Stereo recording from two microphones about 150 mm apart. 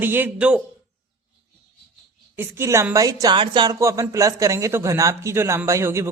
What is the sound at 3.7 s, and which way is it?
Speech, 20° right (ahead or behind).